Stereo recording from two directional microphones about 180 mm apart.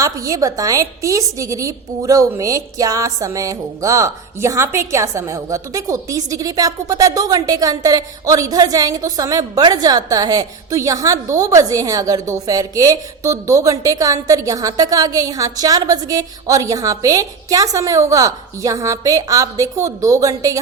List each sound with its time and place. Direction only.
0.0 s a woman's voice: 20° right (ahead or behind)